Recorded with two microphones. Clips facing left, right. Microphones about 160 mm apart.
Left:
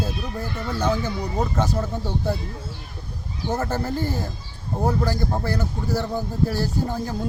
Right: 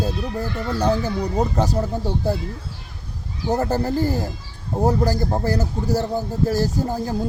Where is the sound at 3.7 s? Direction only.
40° right (ahead or behind).